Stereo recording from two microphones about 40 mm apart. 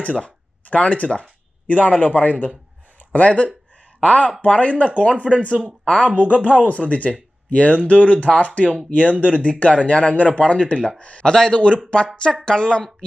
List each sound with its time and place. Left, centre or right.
0.0 s a man's voice: left
5.8 s speech: centre
6.1 s speech: right
6.4 s speech: left
11.3 s a man's voice: centre